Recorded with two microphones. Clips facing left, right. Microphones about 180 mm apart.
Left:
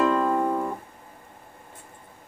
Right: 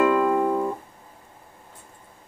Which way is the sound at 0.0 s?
10° right (ahead or behind).